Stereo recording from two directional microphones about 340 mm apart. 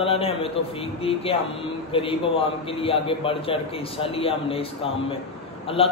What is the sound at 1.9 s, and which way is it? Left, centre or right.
A man's voice, centre.